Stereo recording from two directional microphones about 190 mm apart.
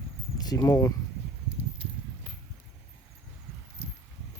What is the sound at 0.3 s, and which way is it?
Speech, 20° left (ahead or behind).